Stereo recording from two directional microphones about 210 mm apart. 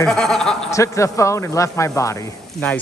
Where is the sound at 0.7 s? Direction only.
15° left (ahead or behind).